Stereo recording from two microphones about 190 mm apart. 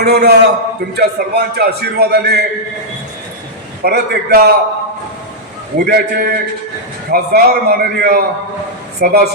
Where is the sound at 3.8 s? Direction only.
55° right (ahead or behind).